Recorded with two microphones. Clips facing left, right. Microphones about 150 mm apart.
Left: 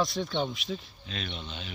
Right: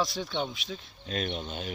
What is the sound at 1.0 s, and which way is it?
Speech, 45° right (ahead or behind).